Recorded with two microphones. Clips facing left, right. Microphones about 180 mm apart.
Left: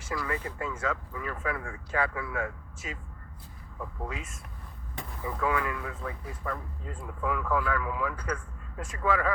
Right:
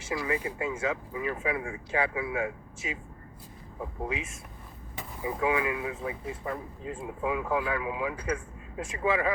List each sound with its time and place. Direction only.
0.1 s speech: 25° right (ahead or behind)
0.3 s speech: 10° right (ahead or behind)
4.9 s speech: 15° right (ahead or behind)